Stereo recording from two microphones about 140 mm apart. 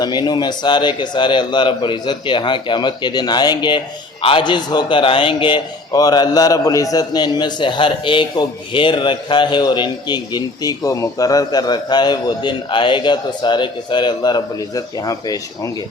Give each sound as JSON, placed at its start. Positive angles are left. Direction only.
{"t": 0.0, "sound": "a man's voice", "side_deg": 30}